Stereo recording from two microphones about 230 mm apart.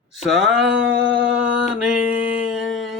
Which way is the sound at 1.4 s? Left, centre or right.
Centre.